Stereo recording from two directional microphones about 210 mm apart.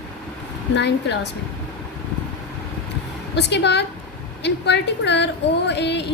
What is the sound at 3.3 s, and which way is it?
A woman's voice, 55° left (ahead or behind).